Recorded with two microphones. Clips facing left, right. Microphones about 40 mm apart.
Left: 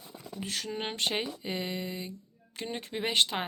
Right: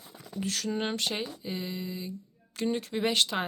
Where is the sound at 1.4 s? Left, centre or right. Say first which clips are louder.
Left 1 dB; left.